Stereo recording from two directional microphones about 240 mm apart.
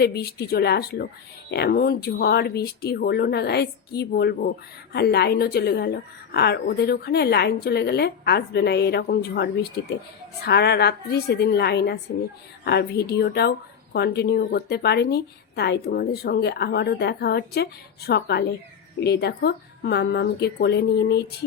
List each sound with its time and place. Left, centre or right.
0.0 s a woman's voice: left